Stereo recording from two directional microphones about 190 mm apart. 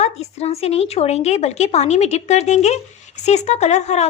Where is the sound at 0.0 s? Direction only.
35° left (ahead or behind).